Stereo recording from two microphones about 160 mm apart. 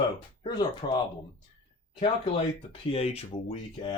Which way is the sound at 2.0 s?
35° left (ahead or behind).